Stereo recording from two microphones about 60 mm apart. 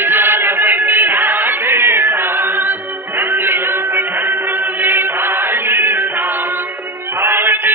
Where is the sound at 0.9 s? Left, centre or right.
Right.